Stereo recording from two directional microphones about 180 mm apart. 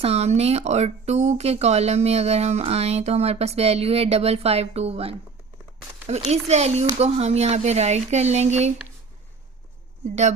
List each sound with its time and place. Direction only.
0.0 s speech: 35° right (ahead or behind)